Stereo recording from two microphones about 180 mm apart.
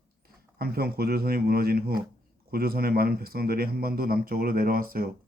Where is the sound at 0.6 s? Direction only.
60° right (ahead or behind).